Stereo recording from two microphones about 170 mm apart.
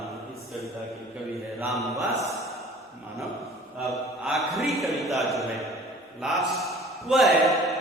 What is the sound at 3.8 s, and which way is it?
Mantra, centre (ahead or behind).